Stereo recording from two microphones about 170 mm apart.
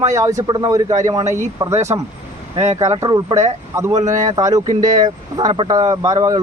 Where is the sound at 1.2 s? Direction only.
45° right (ahead or behind).